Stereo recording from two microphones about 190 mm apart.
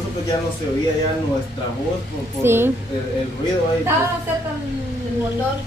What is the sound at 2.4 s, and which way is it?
Speech, 10° right (ahead or behind).